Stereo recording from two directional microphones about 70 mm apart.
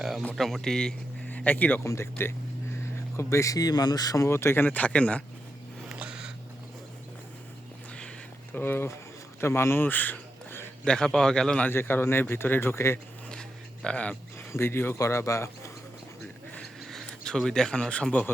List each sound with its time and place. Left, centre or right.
0.3 s speech: centre
1.3 s speech: left
1.8 s speech: left
4.2 s speech: left; by 5.2 s centre
6.0 s a sound: centre
8.5 s speech: left
10.8 s a man's voice: centre
11.7 s speech: left
13.8 s a man's voice: centre
14.3 s speech: left
14.9 s speech: left
16.8 s speech: centre